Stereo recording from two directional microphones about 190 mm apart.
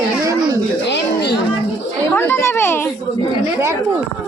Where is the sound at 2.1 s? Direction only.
15° left (ahead or behind).